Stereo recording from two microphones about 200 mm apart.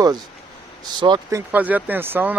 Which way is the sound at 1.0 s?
20° right (ahead or behind).